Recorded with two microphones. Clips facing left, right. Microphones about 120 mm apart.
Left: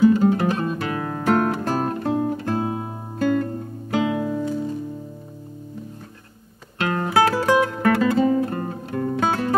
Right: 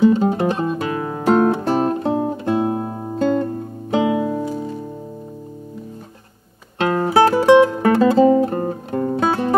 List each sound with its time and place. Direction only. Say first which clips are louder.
0.0 s music: right 1 dB; 25° right (ahead or behind)
6.8 s music: right 5 dB; 25° right (ahead or behind)